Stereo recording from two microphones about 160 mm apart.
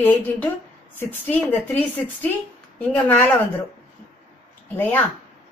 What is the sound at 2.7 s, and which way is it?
Speech, 10° left (ahead or behind).